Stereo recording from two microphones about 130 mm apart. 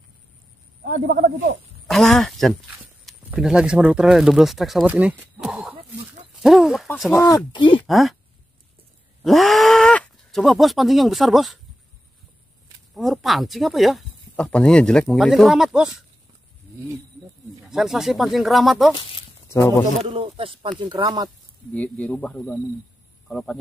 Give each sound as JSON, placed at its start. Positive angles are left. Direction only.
{"t": 1.9, "sound": "a sound", "side_deg": 5}
{"t": 3.3, "sound": "speech", "side_deg": -5}
{"t": 7.1, "sound": "speech", "side_deg": 25}
{"t": 7.8, "sound": "speech", "side_deg": 0}
{"t": 9.2, "sound": "speech", "side_deg": 0}
{"t": 12.9, "sound": "speech", "side_deg": 0}
{"t": 17.6, "sound": "speech", "side_deg": -5}
{"t": 19.4, "sound": "speech", "side_deg": 20}
{"t": 20.0, "sound": "speech", "side_deg": -45}
{"t": 21.0, "sound": "speech", "side_deg": -30}
{"t": 21.7, "sound": "speech", "side_deg": 10}
{"t": 23.2, "sound": "speech", "side_deg": 0}